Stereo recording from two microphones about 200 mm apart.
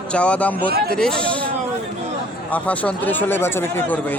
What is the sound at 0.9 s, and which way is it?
Speech, 5° left (ahead or behind).